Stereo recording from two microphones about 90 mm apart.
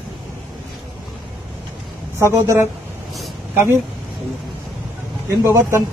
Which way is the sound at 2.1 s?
30° right (ahead or behind).